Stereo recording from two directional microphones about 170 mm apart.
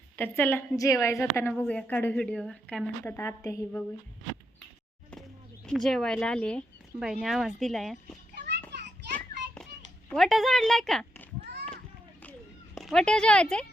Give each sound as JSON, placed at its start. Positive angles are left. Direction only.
{"t": 0.2, "sound": "a woman's voice", "side_deg": 15}
{"t": 5.6, "sound": "speech", "side_deg": 0}
{"t": 8.4, "sound": "children playing", "side_deg": -80}
{"t": 10.1, "sound": "speech", "side_deg": 0}
{"t": 12.7, "sound": "speech", "side_deg": 0}